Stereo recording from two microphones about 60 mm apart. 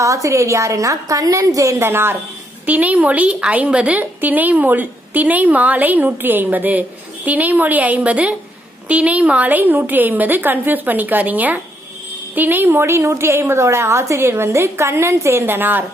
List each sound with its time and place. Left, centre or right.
0.0 s a woman's voice: right
1.8 s a woman's voice: right
2.6 s a woman's voice: right